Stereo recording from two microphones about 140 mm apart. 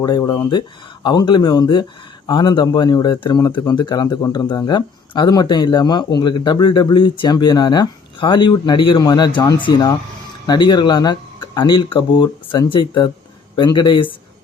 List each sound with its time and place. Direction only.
0.0 s speech: 25° left (ahead or behind)